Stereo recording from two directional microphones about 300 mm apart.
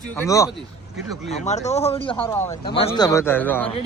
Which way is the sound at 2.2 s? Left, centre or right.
Centre.